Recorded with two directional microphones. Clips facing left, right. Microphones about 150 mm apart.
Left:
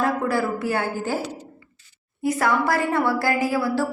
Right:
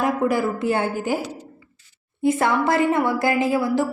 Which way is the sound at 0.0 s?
15° right (ahead or behind).